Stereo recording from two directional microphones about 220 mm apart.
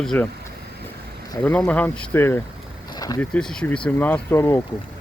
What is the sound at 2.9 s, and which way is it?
Boat, 15° left (ahead or behind).